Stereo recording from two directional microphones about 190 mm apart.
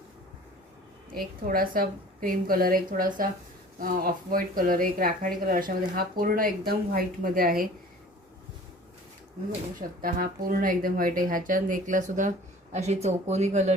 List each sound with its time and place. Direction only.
1.1 s speech: 50° right (ahead or behind)
10.0 s speech: 50° right (ahead or behind)